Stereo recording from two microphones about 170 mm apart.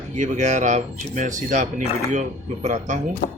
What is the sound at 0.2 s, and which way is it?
A man's voice, 45° right (ahead or behind).